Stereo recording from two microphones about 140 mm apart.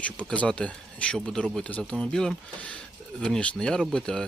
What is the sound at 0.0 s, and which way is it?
Speech, 10° left (ahead or behind).